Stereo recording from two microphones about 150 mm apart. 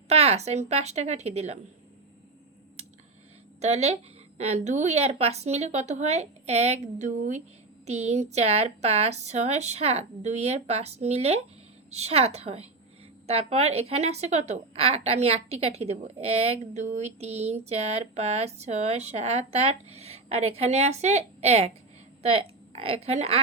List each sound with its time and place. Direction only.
0.1 s speech: 45° right (ahead or behind)
2.8 s a sound: 45° right (ahead or behind)
3.6 s a woman's voice: 45° right (ahead or behind)